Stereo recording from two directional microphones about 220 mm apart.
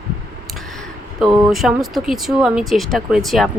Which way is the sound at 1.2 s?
Centre (ahead or behind).